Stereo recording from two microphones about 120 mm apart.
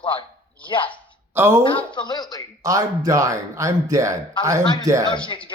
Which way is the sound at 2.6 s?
30° right (ahead or behind).